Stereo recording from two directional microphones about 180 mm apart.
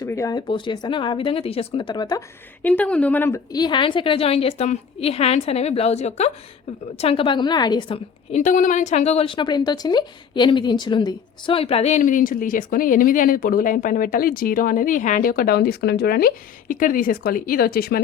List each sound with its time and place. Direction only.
0.0 s speech: 20° left (ahead or behind)
2.6 s a woman's voice: 10° left (ahead or behind); by 8.4 s 30° left (ahead or behind)
8.4 s speech: 45° left (ahead or behind)